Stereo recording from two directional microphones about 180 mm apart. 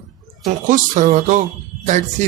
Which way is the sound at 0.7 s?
45° right (ahead or behind).